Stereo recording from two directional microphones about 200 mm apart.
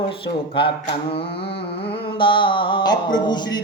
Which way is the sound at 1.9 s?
25° left (ahead or behind).